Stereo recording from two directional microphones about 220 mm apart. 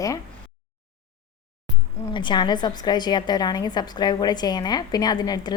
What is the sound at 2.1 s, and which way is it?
A woman's voice, 20° left (ahead or behind).